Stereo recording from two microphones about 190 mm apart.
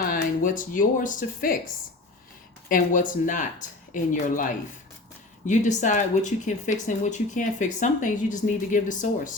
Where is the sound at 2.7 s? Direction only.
45° left (ahead or behind).